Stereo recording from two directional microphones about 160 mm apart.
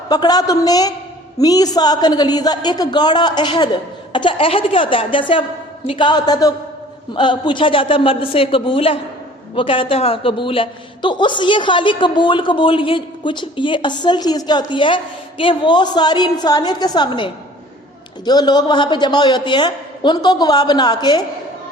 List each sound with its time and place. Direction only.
0.1 s a man's voice: 25° left (ahead or behind)